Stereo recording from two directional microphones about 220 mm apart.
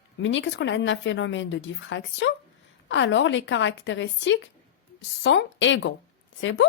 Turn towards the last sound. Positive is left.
turn(degrees=60)  # may be behind; listen again after turning